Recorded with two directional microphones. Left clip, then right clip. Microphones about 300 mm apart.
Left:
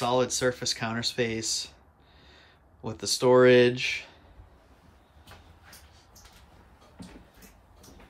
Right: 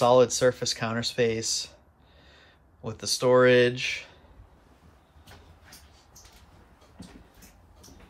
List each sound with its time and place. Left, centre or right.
0.0 s speech: centre